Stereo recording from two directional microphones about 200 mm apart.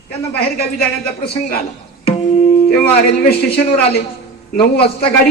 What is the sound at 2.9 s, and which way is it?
A man's voice, 50° left (ahead or behind).